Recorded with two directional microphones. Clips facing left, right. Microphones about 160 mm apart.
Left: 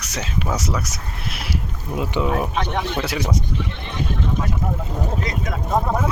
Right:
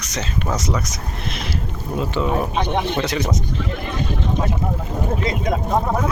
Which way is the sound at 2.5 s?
20° right (ahead or behind).